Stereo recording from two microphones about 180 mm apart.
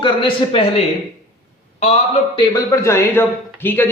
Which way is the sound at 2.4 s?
20° left (ahead or behind).